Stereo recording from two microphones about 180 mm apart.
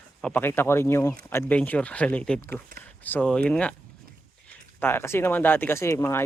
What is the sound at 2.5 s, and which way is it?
Speech, 55° right (ahead or behind).